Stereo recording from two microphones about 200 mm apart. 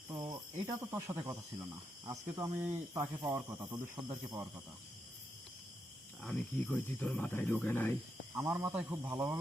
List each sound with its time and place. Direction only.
0.1 s speech: 15° right (ahead or behind)
6.2 s speech: 10° left (ahead or behind)
8.4 s speech: 15° right (ahead or behind)